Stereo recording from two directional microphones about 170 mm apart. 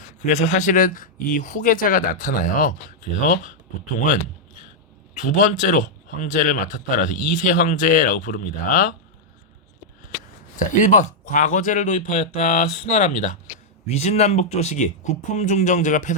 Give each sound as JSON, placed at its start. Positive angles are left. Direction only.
{"t": 0.3, "sound": "speech", "side_deg": 45}
{"t": 5.2, "sound": "speech", "side_deg": 50}
{"t": 10.8, "sound": "speech", "side_deg": 45}